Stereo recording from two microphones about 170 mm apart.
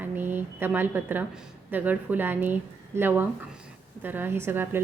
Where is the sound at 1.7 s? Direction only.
10° right (ahead or behind).